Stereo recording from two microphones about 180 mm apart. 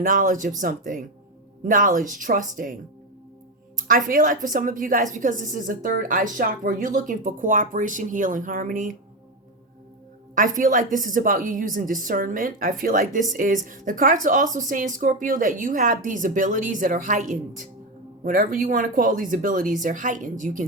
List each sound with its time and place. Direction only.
0.0 s speech: 45° right (ahead or behind)
3.8 s speech: 50° right (ahead or behind)
10.3 s speech: 50° right (ahead or behind)